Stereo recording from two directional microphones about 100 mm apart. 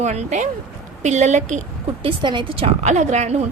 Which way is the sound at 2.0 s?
55° right (ahead or behind).